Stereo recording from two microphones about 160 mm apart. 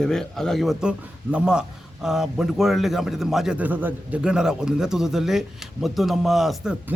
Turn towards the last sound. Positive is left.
turn(degrees=0)  # may be behind; listen again after turning